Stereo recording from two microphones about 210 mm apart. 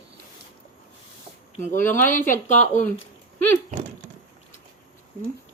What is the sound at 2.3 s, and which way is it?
Speech, 35° left (ahead or behind).